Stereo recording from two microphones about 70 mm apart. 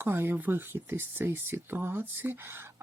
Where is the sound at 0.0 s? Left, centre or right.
Right.